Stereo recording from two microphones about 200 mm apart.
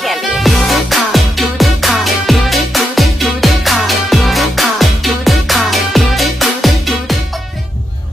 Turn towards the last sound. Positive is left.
turn(degrees=0)  # may be behind; listen again after turning